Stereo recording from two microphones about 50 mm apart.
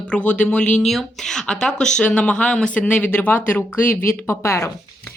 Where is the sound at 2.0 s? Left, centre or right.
Left.